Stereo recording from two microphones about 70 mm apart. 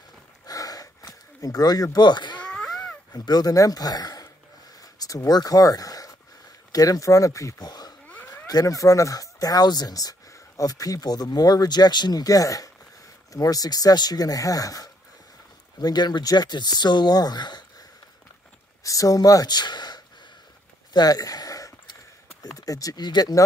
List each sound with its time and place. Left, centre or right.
0.5 s a sound: left
2.4 s a sound: centre
3.1 s speech: left
7.6 s cat: left
8.5 s speech: left
10.6 s speech: left
15.8 s speech: left
18.9 s speech: left
20.9 s a sound: left
22.7 s speech: left